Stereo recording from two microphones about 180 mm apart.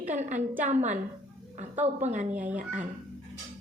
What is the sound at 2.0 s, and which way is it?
Speech, 45° right (ahead or behind).